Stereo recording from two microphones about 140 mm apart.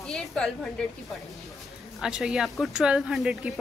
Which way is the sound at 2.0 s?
5° right (ahead or behind).